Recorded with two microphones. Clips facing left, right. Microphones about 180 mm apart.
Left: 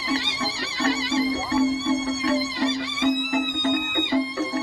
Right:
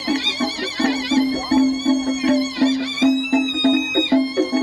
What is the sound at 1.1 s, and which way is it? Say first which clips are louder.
Music: right 9 dB; 70° right (ahead or behind).